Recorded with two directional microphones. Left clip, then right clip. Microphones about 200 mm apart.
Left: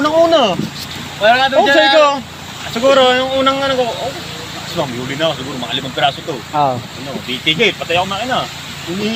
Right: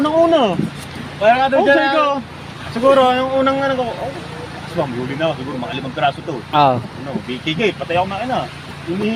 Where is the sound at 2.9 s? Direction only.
10° left (ahead or behind).